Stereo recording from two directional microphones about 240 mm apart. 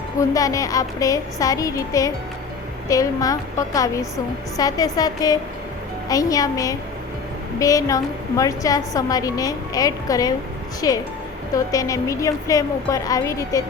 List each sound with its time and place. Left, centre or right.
0.2 s a woman's voice: centre